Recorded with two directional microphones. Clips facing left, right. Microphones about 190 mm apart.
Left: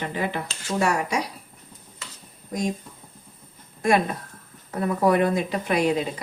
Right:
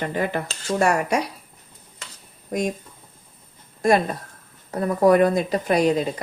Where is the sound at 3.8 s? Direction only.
35° right (ahead or behind).